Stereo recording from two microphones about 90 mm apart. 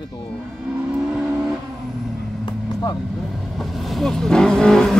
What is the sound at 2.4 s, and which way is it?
Vehicle, 50° left (ahead or behind).